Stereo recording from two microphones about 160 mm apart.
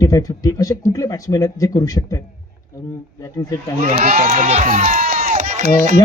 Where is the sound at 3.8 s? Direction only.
50° right (ahead or behind).